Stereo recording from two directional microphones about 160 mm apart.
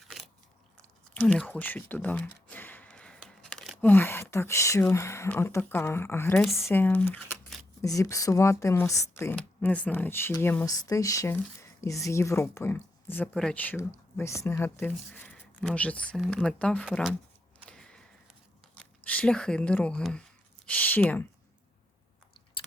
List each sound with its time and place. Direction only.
1.1 s a sound: 10° left (ahead or behind)
3.8 s speech: 15° left (ahead or behind)
10.7 s speech: 20° left (ahead or behind); by 17.1 s centre (ahead or behind)
17.7 s a sound: 5° left (ahead or behind)
18.7 s speech: 10° left (ahead or behind)
22.6 s biting: 35° left (ahead or behind)